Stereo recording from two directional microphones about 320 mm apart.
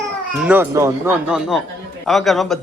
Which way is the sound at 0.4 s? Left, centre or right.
Centre.